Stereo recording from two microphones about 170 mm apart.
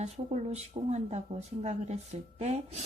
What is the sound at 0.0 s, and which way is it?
Speech, 40° right (ahead or behind).